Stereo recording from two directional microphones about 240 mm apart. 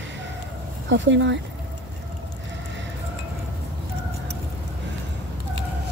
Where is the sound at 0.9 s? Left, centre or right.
Right.